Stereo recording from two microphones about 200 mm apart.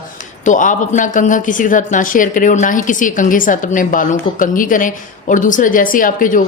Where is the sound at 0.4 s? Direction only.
40° left (ahead or behind).